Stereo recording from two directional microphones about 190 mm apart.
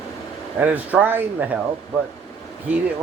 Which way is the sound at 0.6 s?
10° right (ahead or behind).